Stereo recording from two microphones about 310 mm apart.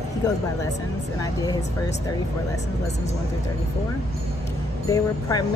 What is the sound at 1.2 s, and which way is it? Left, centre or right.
Speech, centre.